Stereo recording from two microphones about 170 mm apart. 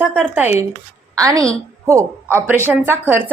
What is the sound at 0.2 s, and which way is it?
A woman's voice, 10° right (ahead or behind).